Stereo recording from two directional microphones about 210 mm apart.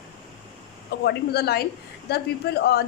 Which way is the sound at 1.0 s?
50° left (ahead or behind).